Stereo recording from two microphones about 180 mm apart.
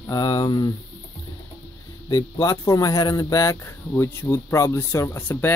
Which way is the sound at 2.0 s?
20° left (ahead or behind).